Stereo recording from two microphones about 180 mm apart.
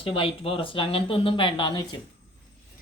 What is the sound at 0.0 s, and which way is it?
Speech, 30° left (ahead or behind).